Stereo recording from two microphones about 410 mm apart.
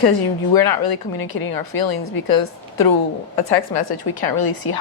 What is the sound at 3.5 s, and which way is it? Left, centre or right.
A woman's voice, left.